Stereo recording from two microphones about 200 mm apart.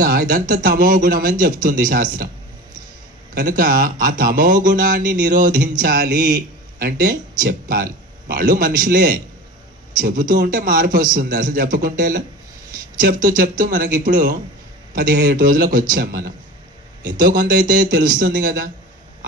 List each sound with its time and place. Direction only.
0.0 s a man's voice: 45° right (ahead or behind)
3.3 s a man's voice: 45° right (ahead or behind)
5.3 s a sound: 40° right (ahead or behind)
5.8 s a man's voice: 45° right (ahead or behind)